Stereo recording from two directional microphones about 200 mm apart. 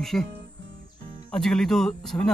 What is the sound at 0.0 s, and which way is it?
Speech, centre (ahead or behind).